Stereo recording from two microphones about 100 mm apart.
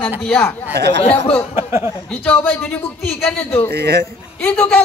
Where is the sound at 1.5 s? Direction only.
25° right (ahead or behind).